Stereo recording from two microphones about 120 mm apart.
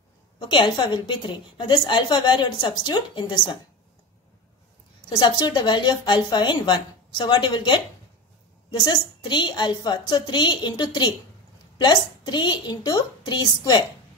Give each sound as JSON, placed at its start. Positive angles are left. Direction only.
{"t": 0.4, "sound": "a woman's voice", "side_deg": 40}
{"t": 5.2, "sound": "a woman's voice", "side_deg": 35}
{"t": 8.8, "sound": "a woman's voice", "side_deg": 40}